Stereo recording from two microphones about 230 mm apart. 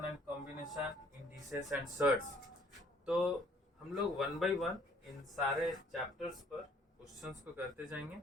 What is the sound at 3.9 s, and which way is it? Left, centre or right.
Speech, centre.